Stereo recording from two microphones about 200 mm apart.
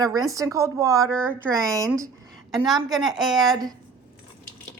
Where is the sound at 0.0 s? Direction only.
15° right (ahead or behind).